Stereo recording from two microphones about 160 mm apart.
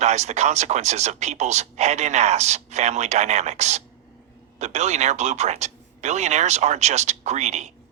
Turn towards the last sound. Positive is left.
turn(degrees=-45)  # may be behind; listen again after turning